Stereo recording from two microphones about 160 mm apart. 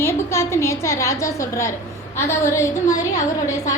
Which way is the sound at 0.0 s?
15° left (ahead or behind).